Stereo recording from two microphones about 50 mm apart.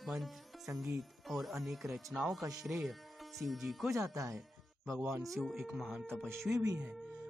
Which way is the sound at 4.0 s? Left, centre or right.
Right.